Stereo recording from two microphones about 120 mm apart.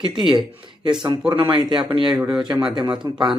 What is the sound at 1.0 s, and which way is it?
Speech, 40° right (ahead or behind).